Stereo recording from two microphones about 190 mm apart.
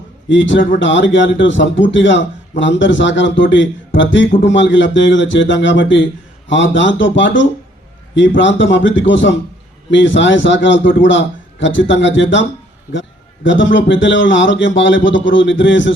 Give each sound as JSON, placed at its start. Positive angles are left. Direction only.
{"t": 0.3, "sound": "a man's voice", "side_deg": 75}